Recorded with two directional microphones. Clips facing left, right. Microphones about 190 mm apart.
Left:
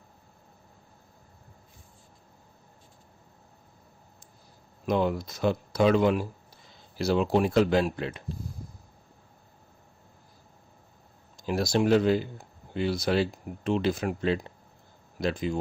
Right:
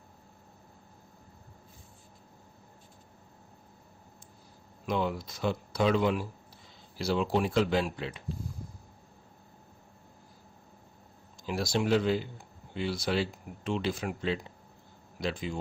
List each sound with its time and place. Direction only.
4.9 s speech: 45° left (ahead or behind)
11.4 s speech: 45° left (ahead or behind)